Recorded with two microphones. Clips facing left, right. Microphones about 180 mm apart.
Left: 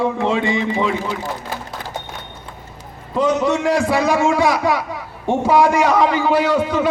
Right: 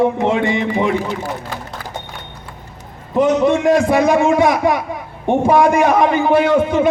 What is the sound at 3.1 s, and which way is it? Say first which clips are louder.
A man's voice: right 4 dB; 20° right (ahead or behind).